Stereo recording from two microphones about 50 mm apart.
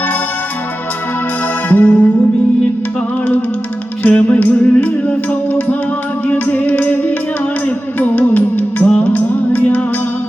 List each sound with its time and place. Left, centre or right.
1.7 s music: left
4.0 s music: left